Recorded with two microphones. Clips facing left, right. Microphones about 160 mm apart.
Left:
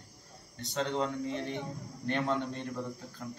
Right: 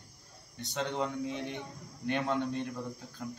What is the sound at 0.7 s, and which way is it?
A man's voice, 10° right (ahead or behind).